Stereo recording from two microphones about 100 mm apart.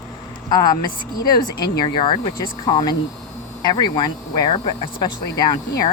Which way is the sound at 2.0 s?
60° left (ahead or behind).